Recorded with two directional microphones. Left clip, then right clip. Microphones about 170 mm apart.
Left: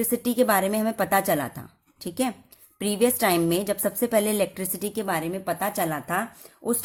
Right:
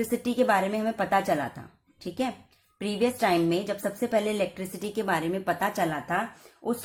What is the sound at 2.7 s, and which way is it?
A woman's voice, 40° left (ahead or behind).